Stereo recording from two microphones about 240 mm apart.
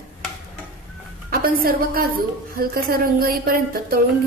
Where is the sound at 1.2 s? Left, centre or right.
Right.